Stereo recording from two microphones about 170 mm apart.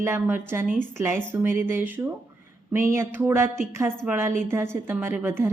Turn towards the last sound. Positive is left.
turn(degrees=-15)  # may be behind; listen again after turning